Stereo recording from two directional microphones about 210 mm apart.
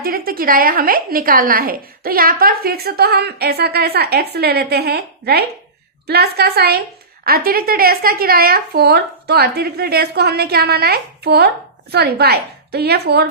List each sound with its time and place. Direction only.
0.0 s a woman's voice: 45° right (ahead or behind)